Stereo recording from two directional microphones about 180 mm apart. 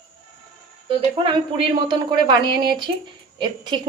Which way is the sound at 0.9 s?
30° right (ahead or behind).